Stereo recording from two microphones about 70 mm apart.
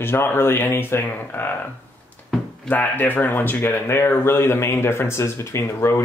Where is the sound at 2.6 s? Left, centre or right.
Left.